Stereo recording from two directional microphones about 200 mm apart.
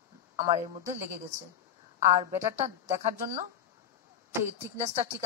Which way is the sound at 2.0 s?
35° right (ahead or behind).